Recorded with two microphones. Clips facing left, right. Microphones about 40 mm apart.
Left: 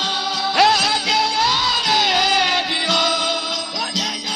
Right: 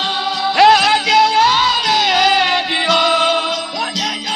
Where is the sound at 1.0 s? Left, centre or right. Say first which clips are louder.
Right 7 dB; centre.